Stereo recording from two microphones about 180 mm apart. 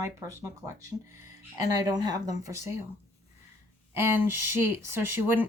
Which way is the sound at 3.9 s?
15° right (ahead or behind).